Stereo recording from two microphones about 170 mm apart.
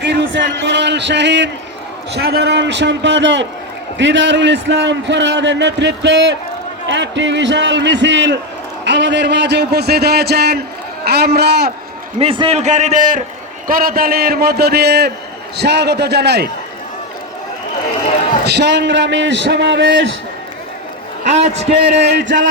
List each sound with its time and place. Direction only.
0.0 s speech: 90° right
2.1 s a man's voice: 75° right (ahead or behind)
12.2 s a man's voice: 35° right (ahead or behind); by 16.5 s 80° right
18.4 s a man's voice: 85° right
21.2 s a man's voice: 40° right (ahead or behind)
21.7 s a man's voice: 70° right (ahead or behind)